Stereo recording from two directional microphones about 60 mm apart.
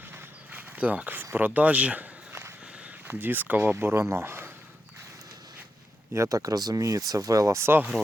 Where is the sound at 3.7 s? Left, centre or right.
Right.